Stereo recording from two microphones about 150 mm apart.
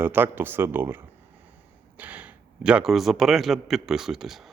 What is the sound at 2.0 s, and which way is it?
A man's voice, 10° right (ahead or behind).